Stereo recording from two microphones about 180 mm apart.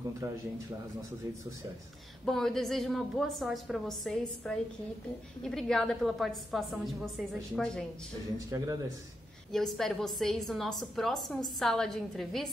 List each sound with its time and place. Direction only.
2.2 s a woman's voice: centre (ahead or behind)
8.5 s speech: 20° right (ahead or behind)
9.5 s a woman's voice: centre (ahead or behind)